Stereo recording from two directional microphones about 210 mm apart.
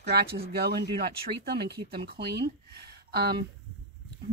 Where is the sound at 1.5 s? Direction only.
50° right (ahead or behind).